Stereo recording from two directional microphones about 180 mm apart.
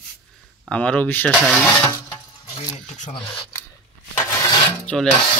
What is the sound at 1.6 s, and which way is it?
Speech, 10° left (ahead or behind).